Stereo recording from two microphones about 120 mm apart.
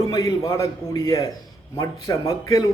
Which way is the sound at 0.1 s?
30° left (ahead or behind).